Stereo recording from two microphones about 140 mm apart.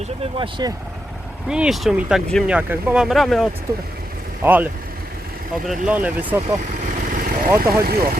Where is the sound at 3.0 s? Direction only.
Centre (ahead or behind).